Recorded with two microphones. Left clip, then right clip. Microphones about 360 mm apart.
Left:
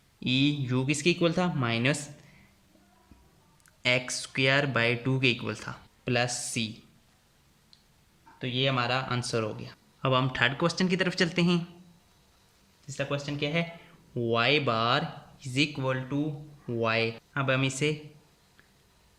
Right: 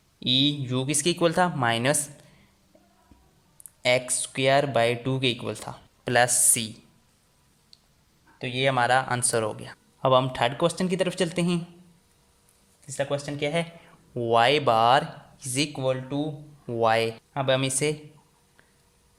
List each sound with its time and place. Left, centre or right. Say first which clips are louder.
0.2 s speech: right 4 dB; centre
3.8 s speech: right 4 dB; centre
8.5 s speech: right 6 dB; centre
12.9 s speech: right 4 dB; centre